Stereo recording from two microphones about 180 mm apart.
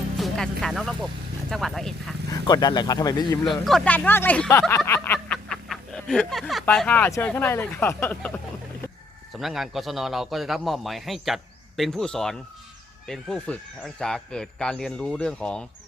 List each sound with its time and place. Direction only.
0.2 s speech: centre (ahead or behind)
2.3 s speech: 20° left (ahead or behind)
3.7 s speech: 5° left (ahead or behind)
9.3 s speech: centre (ahead or behind)